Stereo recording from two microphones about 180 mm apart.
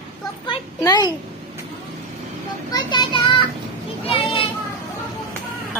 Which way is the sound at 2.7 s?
25° left (ahead or behind).